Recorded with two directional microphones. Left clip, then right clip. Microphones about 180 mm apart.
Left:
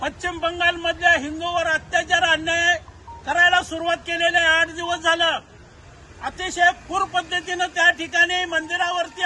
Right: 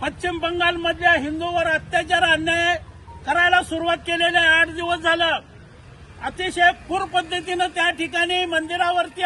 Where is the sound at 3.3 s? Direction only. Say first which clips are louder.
Even; 5° left (ahead or behind).